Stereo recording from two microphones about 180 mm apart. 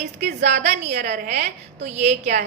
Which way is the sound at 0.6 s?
40° right (ahead or behind).